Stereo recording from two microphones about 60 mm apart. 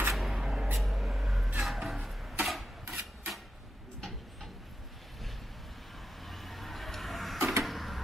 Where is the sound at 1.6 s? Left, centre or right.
Centre.